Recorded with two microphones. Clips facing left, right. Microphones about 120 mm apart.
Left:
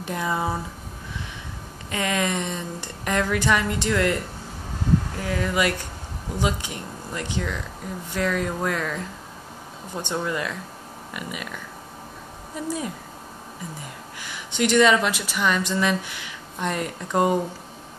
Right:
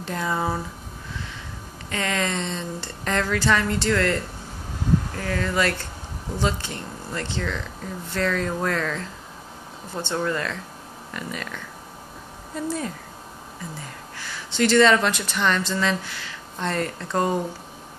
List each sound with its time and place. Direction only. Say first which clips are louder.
0.0 s speech: even; 15° left (ahead or behind)
1.9 s speech: left 1 dB; 15° left (ahead or behind)
10.0 s speech: right 1 dB; 15° left (ahead or behind)
14.2 s speech: right 2 dB; 15° left (ahead or behind)